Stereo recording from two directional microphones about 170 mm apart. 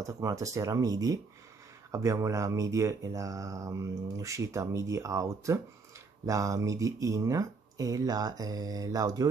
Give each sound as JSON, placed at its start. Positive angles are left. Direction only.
{"t": 0.0, "sound": "speech", "side_deg": -20}